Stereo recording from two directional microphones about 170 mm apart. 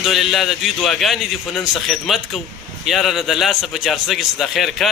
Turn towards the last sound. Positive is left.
turn(degrees=0)  # may be behind; listen again after turning